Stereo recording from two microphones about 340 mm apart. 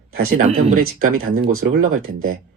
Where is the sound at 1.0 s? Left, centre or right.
Right.